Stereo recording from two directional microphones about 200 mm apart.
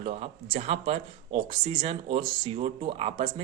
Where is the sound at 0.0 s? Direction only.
30° right (ahead or behind).